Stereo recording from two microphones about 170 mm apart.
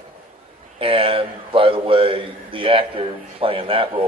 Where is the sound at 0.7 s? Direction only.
30° right (ahead or behind).